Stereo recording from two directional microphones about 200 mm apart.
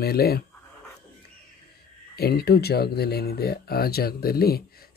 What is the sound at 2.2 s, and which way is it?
Speech, 50° left (ahead or behind).